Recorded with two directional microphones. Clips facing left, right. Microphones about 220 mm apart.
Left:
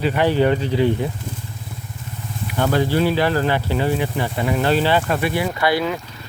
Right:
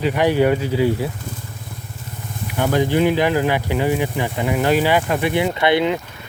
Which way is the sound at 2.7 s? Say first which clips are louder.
Right 2 dB; 15° right (ahead or behind).